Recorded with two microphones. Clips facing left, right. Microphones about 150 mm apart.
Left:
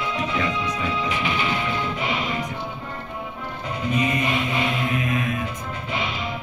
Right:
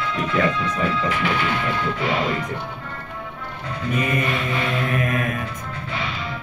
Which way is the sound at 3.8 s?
15° left (ahead or behind).